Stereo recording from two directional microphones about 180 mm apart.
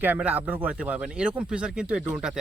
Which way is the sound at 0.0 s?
10° right (ahead or behind).